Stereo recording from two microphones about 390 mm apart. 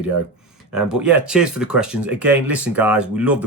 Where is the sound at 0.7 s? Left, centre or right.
Centre.